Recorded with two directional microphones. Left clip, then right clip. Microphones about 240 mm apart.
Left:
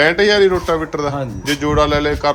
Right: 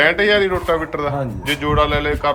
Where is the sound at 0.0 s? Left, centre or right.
Centre.